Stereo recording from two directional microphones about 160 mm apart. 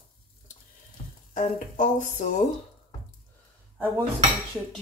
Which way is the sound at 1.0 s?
45° left (ahead or behind).